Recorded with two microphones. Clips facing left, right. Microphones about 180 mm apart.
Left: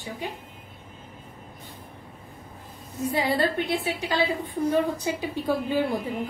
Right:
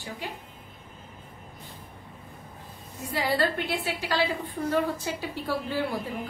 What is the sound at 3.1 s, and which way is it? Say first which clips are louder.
A woman's voice: left 2 dB; 20° left (ahead or behind).